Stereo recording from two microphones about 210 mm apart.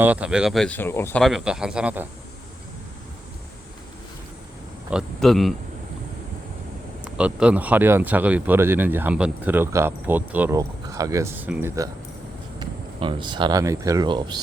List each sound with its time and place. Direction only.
0.0 s speech: 5° right (ahead or behind); by 1.2 s 10° left (ahead or behind)
1.2 s speech: centre (ahead or behind)
4.9 s speech: centre (ahead or behind)
7.0 s speech: 5° right (ahead or behind)
12.5 s speech: 20° right (ahead or behind)